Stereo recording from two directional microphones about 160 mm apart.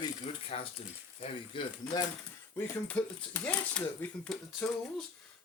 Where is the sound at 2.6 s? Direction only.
10° left (ahead or behind).